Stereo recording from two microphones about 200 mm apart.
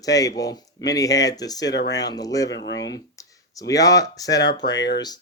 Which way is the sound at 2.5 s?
65° left (ahead or behind).